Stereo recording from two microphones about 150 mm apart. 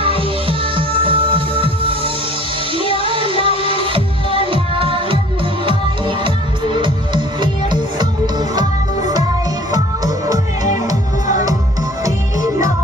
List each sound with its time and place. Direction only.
0.0 s music: 35° right (ahead or behind); by 12.7 s 20° right (ahead or behind)